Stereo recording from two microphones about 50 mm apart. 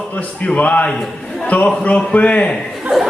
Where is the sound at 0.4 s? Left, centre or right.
Left.